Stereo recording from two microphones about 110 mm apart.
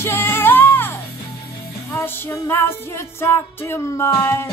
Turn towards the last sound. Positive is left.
turn(degrees=20)  # may be behind; listen again after turning